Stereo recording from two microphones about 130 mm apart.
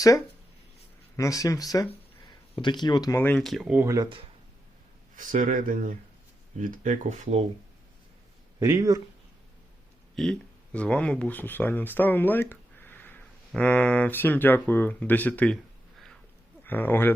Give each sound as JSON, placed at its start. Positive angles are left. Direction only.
{"t": 1.1, "sound": "speech", "side_deg": 25}
{"t": 3.2, "sound": "speech", "side_deg": 15}
{"t": 3.4, "sound": "speech", "side_deg": -5}
{"t": 3.8, "sound": "speech", "side_deg": -25}
{"t": 5.1, "sound": "speech", "side_deg": -85}
{"t": 6.6, "sound": "speech", "side_deg": -80}
{"t": 8.5, "sound": "speech", "side_deg": -25}
{"t": 10.2, "sound": "speech", "side_deg": 5}
{"t": 16.6, "sound": "speech", "side_deg": 15}